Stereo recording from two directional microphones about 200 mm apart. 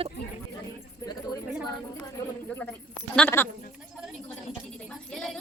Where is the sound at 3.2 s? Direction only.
10° left (ahead or behind).